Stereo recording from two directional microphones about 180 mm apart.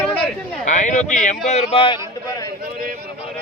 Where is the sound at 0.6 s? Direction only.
45° left (ahead or behind).